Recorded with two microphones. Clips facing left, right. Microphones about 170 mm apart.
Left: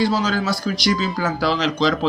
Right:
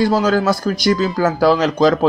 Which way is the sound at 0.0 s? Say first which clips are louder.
Right 5 dB; 50° right (ahead or behind).